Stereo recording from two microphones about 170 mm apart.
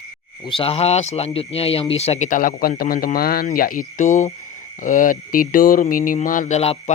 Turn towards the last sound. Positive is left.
turn(degrees=40)  # may be behind; listen again after turning